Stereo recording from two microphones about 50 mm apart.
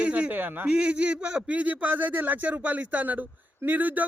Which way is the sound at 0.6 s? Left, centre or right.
Right.